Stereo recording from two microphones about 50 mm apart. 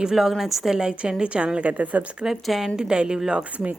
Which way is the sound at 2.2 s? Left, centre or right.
Centre.